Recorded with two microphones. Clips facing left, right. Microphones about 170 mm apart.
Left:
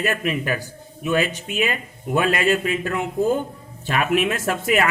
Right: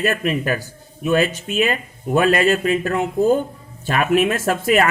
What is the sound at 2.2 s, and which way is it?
A man's voice, 40° right (ahead or behind).